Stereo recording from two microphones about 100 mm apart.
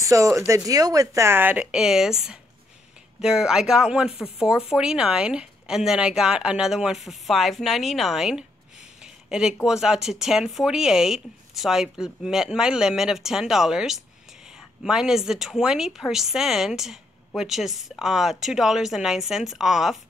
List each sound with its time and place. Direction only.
0.0 s speech: 30° right (ahead or behind); by 8.5 s 5° right (ahead or behind)
9.0 s a sound: 5° right (ahead or behind)
9.7 s speech: 5° right (ahead or behind)